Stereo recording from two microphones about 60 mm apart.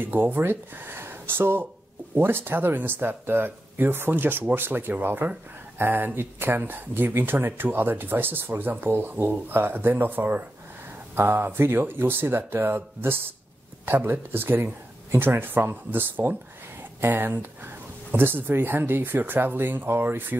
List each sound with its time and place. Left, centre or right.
0.0 s speech: right